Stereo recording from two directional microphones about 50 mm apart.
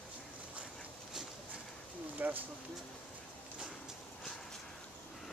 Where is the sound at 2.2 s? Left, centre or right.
Right.